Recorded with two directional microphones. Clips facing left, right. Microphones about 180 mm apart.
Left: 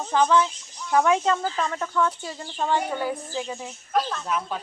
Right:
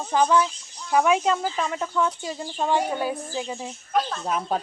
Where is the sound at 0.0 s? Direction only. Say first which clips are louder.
Even; 10° right (ahead or behind).